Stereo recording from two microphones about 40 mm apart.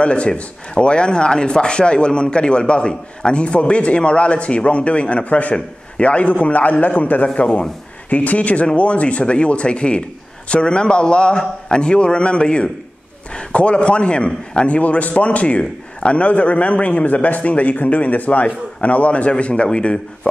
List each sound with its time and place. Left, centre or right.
0.0 s a man's voice: left